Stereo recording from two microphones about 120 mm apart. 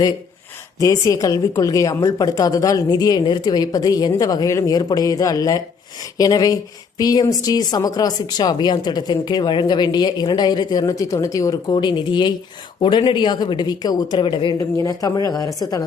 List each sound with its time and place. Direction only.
0.8 s a woman's voice: 25° left (ahead or behind); by 14.5 s 45° left (ahead or behind)
14.6 s a woman's voice: 30° left (ahead or behind)